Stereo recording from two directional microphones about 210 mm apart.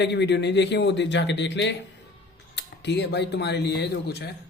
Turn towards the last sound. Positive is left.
turn(degrees=50)  # may be behind; listen again after turning